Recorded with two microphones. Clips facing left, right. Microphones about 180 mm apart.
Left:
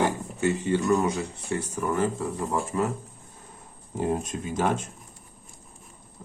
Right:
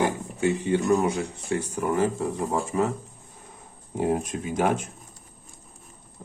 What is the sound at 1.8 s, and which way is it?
Speech, 20° right (ahead or behind).